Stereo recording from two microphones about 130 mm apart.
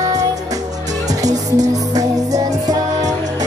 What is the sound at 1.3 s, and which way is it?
Music, 65° right (ahead or behind).